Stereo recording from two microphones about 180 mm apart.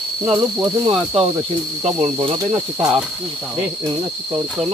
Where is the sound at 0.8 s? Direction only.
25° right (ahead or behind).